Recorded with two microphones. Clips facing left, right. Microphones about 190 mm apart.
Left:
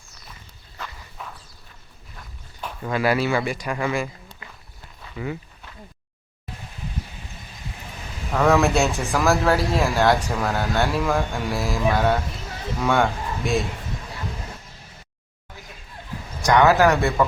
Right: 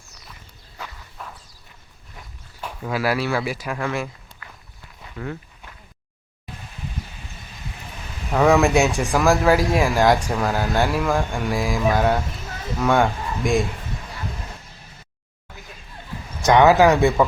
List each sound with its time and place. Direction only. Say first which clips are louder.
1.2 s a sound: even; centre (ahead or behind)
2.1 s speech: right 1 dB; 5° right (ahead or behind)
4.4 s walk: right 1 dB; 20° left (ahead or behind)
5.1 s speech: left 1 dB; 5° left (ahead or behind)
8.3 s speech: right 2 dB; 10° right (ahead or behind)
9.3 s speech: right 3 dB; 10° right (ahead or behind)
16.4 s speech: right 2 dB; 20° right (ahead or behind)